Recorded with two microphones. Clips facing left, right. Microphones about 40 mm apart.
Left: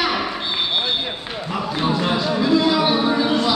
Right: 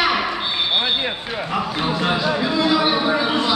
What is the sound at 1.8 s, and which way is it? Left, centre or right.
Speech, centre.